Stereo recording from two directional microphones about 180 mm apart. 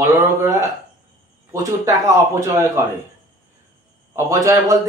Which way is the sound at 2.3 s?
15° right (ahead or behind).